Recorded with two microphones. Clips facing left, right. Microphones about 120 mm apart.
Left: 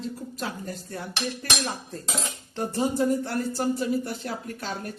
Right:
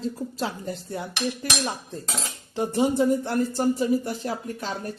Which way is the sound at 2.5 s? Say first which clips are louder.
Right 4 dB; 15° right (ahead or behind).